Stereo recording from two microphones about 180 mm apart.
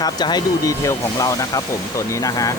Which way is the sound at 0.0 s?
20° left (ahead or behind).